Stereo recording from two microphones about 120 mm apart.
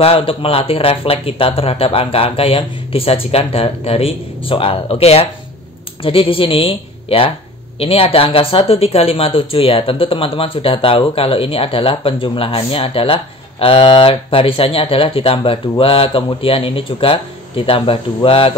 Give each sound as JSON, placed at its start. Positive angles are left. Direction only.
{"t": 0.0, "sound": "speech", "side_deg": 50}